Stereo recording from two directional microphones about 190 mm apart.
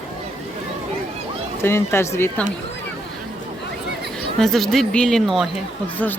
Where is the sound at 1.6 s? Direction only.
15° left (ahead or behind).